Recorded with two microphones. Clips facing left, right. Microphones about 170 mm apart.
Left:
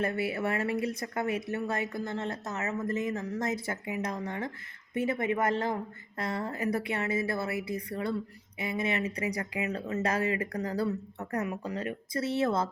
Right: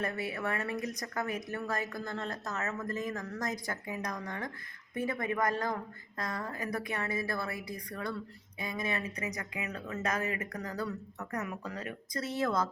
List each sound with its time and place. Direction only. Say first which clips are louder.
0.0 s speech: left 5 dB; 30° left (ahead or behind)